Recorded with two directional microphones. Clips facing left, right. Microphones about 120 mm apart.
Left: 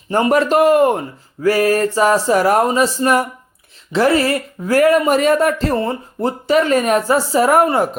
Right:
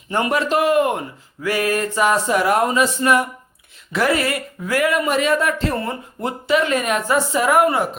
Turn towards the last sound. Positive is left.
turn(degrees=40)  # may be behind; listen again after turning